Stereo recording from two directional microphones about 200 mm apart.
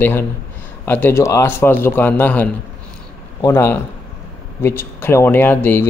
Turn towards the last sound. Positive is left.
turn(degrees=10)  # may be behind; listen again after turning